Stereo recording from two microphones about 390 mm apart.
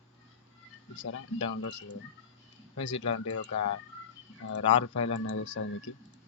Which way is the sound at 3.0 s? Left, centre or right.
Left.